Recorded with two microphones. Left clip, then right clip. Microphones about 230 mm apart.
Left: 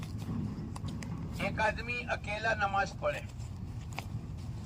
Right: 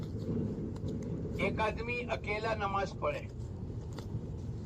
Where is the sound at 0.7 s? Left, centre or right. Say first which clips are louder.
Right 3 dB; left.